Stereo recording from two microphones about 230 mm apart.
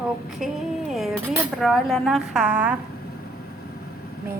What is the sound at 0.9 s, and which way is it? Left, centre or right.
A woman's voice, centre.